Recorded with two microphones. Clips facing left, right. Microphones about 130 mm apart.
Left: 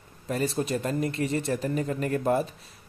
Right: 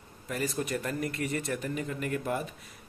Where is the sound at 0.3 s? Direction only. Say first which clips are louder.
Left 5 dB; 30° left (ahead or behind).